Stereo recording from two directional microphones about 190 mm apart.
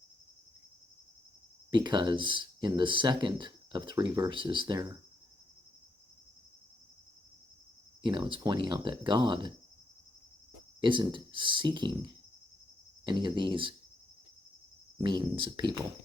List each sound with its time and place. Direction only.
1.7 s speech: 25° right (ahead or behind)
8.0 s speech: 25° right (ahead or behind)
10.8 s speech: 25° right (ahead or behind)
14.9 s speech: 20° right (ahead or behind)